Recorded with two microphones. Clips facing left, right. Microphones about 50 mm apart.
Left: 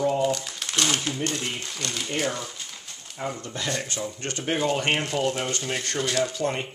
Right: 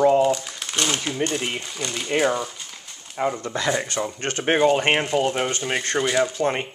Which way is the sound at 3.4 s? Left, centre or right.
Right.